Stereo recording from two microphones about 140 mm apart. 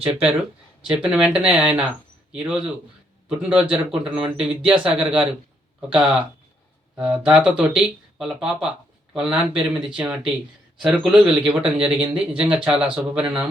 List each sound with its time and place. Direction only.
0.0 s a man's voice: 5° right (ahead or behind)